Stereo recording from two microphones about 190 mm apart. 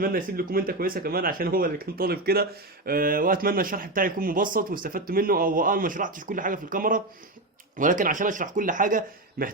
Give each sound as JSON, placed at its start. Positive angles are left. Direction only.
{"t": 0.0, "sound": "speech", "side_deg": -50}